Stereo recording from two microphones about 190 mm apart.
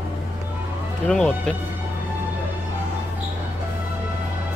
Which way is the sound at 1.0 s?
5° left (ahead or behind).